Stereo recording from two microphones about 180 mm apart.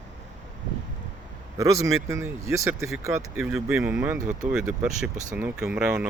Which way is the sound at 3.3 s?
5° right (ahead or behind).